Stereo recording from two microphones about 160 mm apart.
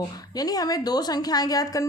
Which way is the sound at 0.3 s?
25° left (ahead or behind).